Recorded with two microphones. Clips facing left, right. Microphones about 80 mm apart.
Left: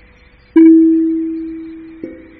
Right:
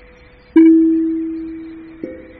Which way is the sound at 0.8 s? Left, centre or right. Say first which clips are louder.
Left 3 dB; left.